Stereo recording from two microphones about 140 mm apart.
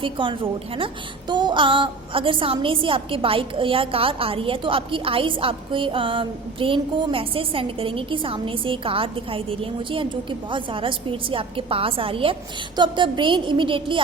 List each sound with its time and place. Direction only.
0.0 s a woman's voice: 35° right (ahead or behind)